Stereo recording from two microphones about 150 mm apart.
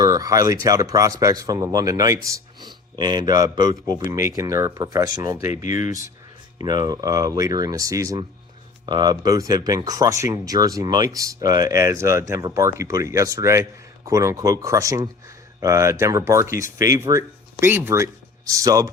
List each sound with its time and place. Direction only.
0.0 s speech: 25° right (ahead or behind)